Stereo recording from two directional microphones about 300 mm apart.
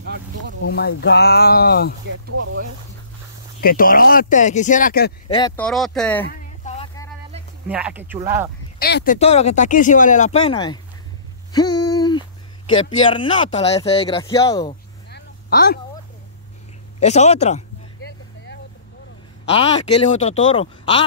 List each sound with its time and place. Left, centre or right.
0.0 s speech: right
0.7 s speech: left
3.6 s speech: left
5.6 s speech: centre
6.2 s a sound: left
7.6 s speech: centre
8.7 s speech: left
11.5 s a sound: centre
13.0 s speech: centre
15.0 s vehicle: left
17.0 s speech: left
19.5 s speech: centre